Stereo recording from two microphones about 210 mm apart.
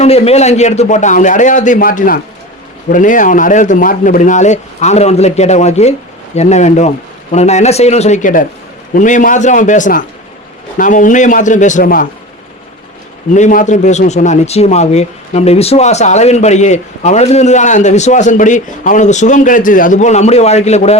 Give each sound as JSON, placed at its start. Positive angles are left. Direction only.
{"t": 0.0, "sound": "speech", "side_deg": 30}
{"t": 13.3, "sound": "speech", "side_deg": 35}